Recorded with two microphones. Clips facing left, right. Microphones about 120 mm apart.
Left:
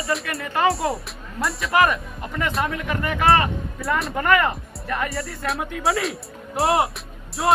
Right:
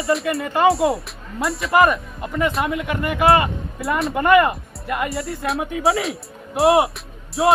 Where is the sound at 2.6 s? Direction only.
15° right (ahead or behind).